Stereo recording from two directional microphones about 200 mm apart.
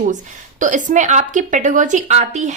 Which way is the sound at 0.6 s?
40° right (ahead or behind).